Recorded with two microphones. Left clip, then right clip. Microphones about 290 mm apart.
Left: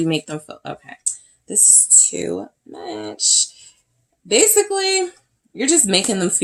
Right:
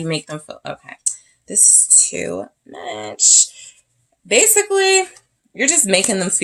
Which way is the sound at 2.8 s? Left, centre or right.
Right.